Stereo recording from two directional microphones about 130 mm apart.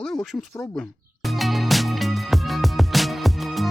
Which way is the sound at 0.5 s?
25° left (ahead or behind).